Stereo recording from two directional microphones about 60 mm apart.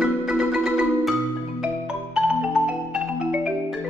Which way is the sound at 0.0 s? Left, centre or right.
Centre.